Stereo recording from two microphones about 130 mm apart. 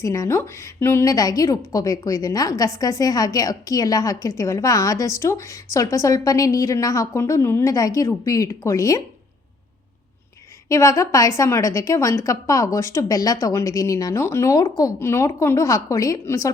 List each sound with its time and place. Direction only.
0.0 s a woman's voice: 25° left (ahead or behind)
10.7 s a woman's voice: 25° left (ahead or behind)